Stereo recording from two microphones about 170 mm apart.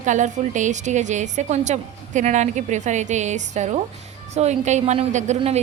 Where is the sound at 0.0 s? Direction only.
45° right (ahead or behind).